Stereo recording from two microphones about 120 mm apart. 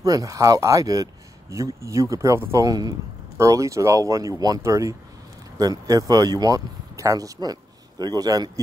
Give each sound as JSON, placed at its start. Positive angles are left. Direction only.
{"t": 0.0, "sound": "speech", "side_deg": -30}